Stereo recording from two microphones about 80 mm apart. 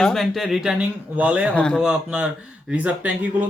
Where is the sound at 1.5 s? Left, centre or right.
Centre.